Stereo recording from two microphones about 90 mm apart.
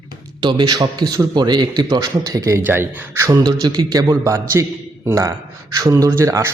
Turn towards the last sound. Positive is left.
turn(degrees=-35)  # may be behind; listen again after turning